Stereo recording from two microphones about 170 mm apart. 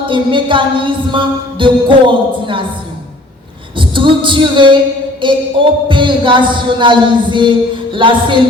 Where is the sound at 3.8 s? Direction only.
30° right (ahead or behind).